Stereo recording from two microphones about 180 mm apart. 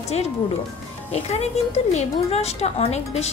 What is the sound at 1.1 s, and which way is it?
A woman's voice, 35° left (ahead or behind).